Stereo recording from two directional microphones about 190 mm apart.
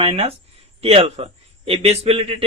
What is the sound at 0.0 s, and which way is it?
A man's voice, 30° right (ahead or behind).